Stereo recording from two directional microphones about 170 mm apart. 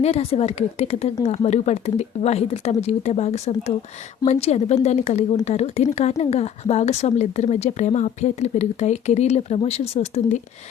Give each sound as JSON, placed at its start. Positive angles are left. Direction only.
{"t": 0.0, "sound": "speech", "side_deg": 35}